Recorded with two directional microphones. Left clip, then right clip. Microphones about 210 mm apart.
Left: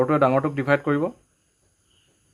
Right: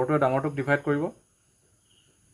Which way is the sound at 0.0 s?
30° left (ahead or behind).